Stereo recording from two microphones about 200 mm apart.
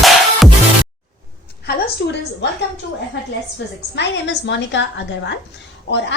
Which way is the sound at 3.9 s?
60° left (ahead or behind).